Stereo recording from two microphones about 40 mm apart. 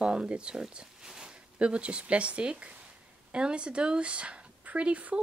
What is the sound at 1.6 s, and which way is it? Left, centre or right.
Speech, right.